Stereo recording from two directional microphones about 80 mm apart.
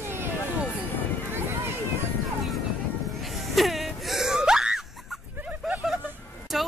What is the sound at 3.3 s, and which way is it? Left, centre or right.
Music, centre.